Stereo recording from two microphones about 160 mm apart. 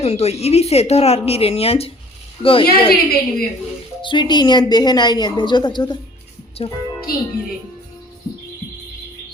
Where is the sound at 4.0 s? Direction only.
30° left (ahead or behind).